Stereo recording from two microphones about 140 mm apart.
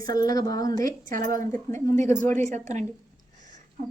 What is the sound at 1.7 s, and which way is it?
Speech, 55° right (ahead or behind).